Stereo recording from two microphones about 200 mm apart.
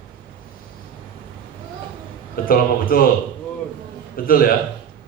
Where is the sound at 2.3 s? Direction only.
45° left (ahead or behind).